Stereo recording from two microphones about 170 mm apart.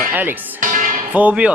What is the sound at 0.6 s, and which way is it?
Music, 50° right (ahead or behind).